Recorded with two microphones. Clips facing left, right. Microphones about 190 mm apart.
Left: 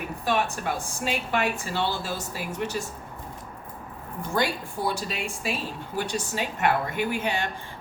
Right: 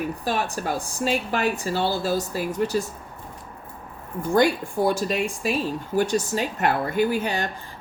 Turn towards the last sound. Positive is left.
turn(degrees=-40)  # may be behind; listen again after turning